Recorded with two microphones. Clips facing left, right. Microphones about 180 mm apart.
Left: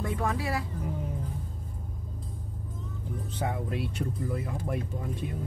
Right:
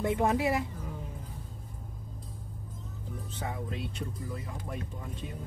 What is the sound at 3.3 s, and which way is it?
Speech, 65° left (ahead or behind).